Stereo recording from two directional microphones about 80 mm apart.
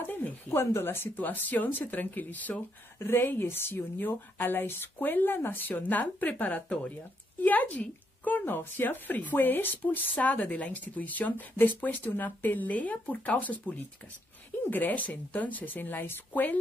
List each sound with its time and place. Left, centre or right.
0.0 s a woman's voice: left
14.6 s a woman's voice: left